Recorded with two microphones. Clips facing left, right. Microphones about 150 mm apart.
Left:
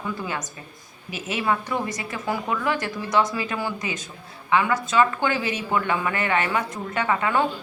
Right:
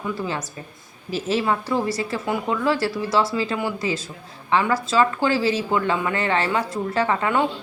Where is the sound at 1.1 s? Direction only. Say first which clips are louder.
Right 3 dB; 35° right (ahead or behind).